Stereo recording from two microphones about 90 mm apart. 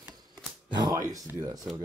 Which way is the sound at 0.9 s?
40° right (ahead or behind).